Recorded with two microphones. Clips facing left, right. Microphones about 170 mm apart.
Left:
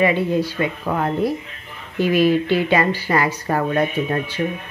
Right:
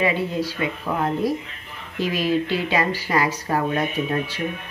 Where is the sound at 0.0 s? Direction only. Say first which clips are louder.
Left 4 dB; 55° left (ahead or behind).